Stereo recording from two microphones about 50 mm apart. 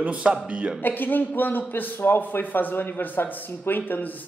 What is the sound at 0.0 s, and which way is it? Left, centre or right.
Speech, right.